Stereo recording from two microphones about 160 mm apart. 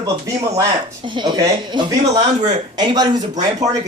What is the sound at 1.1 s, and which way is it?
Speech, 30° right (ahead or behind).